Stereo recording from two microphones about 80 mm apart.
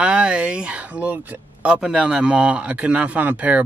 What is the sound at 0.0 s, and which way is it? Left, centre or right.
Speech, centre.